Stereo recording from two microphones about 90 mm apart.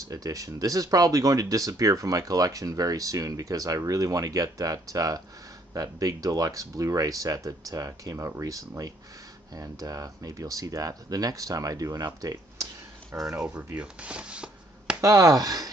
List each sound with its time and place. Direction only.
0.1 s speech: 40° right (ahead or behind)
12.2 s a sound: 40° right (ahead or behind)
13.1 s speech: 35° right (ahead or behind)
13.7 s speech: 15° right (ahead or behind)
15.0 s speech: 40° right (ahead or behind)